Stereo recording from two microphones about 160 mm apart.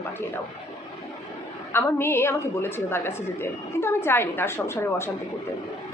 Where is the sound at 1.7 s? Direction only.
15° left (ahead or behind).